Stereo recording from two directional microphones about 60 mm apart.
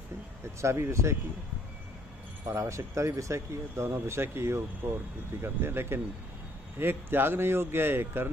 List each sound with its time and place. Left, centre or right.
0.6 s speech: right
2.4 s speech: right